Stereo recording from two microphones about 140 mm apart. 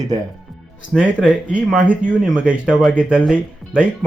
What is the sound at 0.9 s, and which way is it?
Speech, centre (ahead or behind).